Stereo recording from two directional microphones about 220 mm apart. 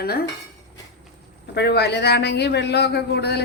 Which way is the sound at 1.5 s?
50° left (ahead or behind).